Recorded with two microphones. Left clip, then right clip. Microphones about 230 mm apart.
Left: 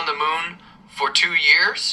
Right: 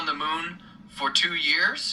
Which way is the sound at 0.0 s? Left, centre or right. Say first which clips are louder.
Left 6 dB; left.